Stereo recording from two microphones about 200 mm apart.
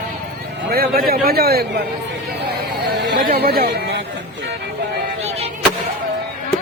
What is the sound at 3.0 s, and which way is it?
Speech, 50° right (ahead or behind).